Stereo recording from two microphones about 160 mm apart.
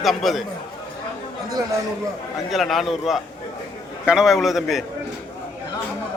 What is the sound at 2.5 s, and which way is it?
A man's voice, centre (ahead or behind).